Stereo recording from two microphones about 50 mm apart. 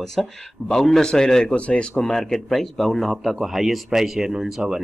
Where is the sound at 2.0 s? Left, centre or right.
Centre.